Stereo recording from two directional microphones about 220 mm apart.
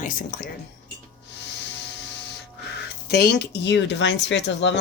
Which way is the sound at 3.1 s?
45° left (ahead or behind).